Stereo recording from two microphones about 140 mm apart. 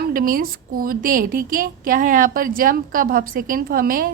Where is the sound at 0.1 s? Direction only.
85° right.